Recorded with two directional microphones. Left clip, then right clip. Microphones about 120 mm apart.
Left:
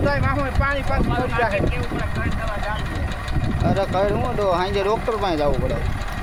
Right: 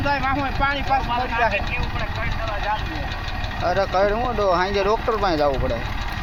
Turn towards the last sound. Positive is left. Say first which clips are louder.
# right 1 dB
turn(degrees=20)  # may be behind; listen again after turning